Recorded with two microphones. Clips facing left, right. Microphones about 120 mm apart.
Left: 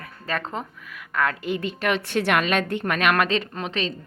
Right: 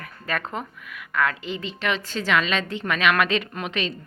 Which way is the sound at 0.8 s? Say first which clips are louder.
Even; 40° left (ahead or behind).